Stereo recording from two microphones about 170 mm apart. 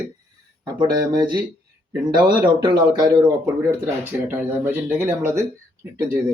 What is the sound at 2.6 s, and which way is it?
Speech, 25° right (ahead or behind).